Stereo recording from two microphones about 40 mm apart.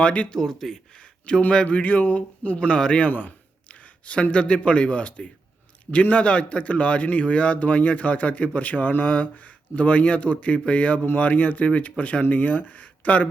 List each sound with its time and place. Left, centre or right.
0.0 s a man's voice: left
0.3 s speech: centre
1.3 s speech: left
1.6 s a man's voice: left
3.1 s speech: left
3.7 s a man's voice: left
12.2 s speech: left